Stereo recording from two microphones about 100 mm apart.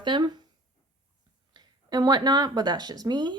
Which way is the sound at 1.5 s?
45° right (ahead or behind).